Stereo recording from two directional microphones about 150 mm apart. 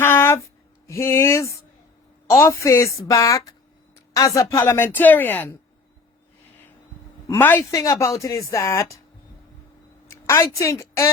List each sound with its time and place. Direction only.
0.0 s a sound: 15° left (ahead or behind)
0.9 s a woman's voice: 20° left (ahead or behind)
7.3 s speech: 15° left (ahead or behind)
10.1 s a woman's voice: 20° left (ahead or behind)